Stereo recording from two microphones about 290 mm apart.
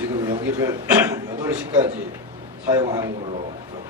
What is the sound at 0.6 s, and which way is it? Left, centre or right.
A man's voice, centre.